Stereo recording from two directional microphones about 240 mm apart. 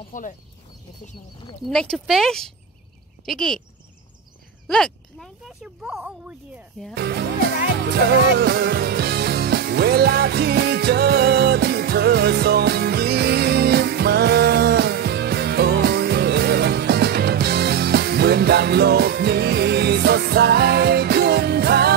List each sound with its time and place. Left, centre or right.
0.1 s speech: left
1.7 s speech: centre
4.6 s speech: centre
7.0 s music: right